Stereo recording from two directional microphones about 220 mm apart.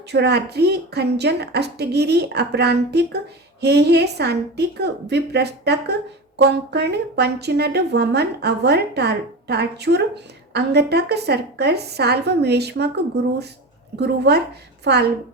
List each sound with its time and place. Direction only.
0.1 s speech: 50° right (ahead or behind)
13.9 s speech: 50° right (ahead or behind)